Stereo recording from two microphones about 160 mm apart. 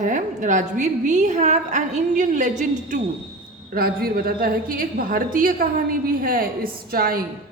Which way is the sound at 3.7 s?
65° right (ahead or behind).